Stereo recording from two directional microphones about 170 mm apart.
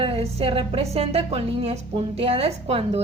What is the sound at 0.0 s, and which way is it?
Speech, 35° right (ahead or behind).